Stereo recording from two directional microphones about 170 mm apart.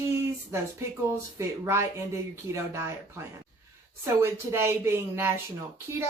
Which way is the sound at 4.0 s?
15° right (ahead or behind).